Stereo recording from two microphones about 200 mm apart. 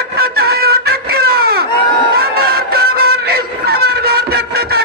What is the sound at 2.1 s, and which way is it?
Music, 50° right (ahead or behind).